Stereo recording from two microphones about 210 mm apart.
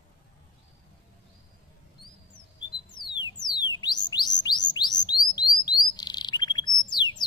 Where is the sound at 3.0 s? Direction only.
20° left (ahead or behind).